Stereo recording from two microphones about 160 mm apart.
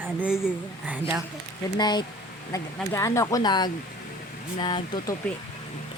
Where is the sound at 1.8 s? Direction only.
25° left (ahead or behind).